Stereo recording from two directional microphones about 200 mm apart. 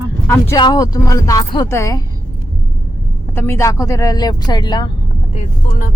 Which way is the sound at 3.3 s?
10° left (ahead or behind).